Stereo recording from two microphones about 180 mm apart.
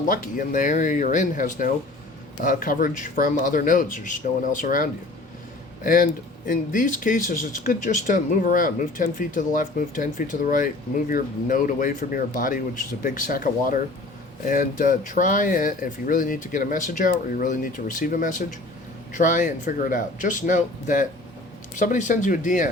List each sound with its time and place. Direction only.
0.1 s speech: 45° left (ahead or behind)